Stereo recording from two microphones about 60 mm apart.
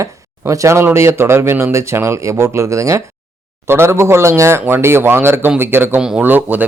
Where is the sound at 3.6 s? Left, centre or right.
Right.